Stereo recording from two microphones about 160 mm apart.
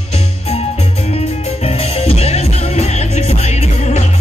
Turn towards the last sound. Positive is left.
turn(degrees=45)  # may be behind; listen again after turning